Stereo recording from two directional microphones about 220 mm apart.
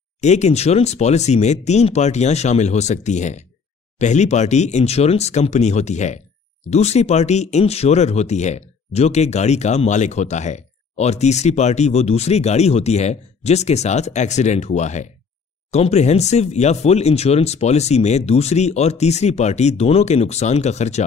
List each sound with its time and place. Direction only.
0.2 s speech: 30° left (ahead or behind)